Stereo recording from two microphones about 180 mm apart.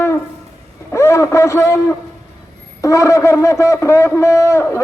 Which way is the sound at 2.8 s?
15° left (ahead or behind).